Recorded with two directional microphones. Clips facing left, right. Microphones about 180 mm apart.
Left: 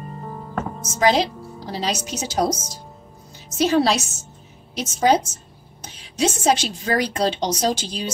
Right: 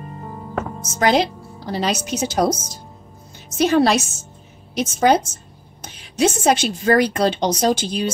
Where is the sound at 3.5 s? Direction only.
55° right (ahead or behind).